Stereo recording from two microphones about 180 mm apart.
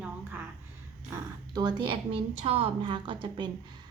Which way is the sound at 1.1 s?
25° right (ahead or behind).